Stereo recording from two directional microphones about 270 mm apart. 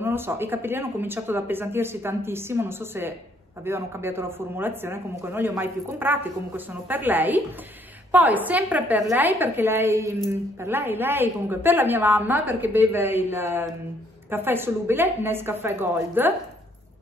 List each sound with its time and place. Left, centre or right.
0.0 s speech: centre